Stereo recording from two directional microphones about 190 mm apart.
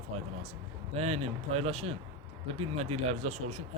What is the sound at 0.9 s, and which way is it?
Speech, 35° right (ahead or behind).